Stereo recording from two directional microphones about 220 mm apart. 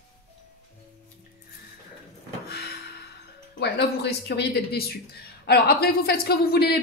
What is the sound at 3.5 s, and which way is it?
Speech, 50° left (ahead or behind).